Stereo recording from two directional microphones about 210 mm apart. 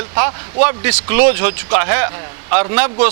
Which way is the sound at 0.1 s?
20° right (ahead or behind).